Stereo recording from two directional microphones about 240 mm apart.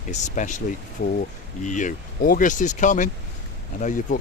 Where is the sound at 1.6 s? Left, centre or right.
Left.